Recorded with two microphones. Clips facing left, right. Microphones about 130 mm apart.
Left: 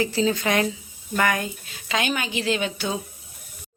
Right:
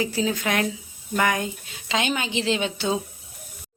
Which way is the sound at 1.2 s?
20° right (ahead or behind).